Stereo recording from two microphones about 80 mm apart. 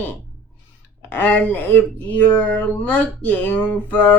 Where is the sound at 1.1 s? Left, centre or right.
Left.